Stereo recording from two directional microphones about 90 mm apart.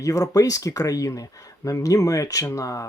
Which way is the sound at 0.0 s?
40° left (ahead or behind).